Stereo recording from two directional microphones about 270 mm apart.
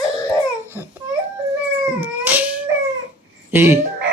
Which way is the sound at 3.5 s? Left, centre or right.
Centre.